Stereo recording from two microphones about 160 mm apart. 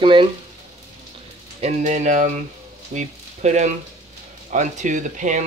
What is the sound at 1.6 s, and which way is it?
Speech, 45° right (ahead or behind).